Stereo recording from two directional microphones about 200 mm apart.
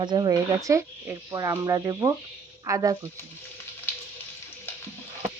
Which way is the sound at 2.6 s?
15° right (ahead or behind).